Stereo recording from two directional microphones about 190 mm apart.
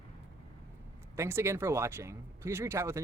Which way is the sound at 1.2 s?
15° right (ahead or behind).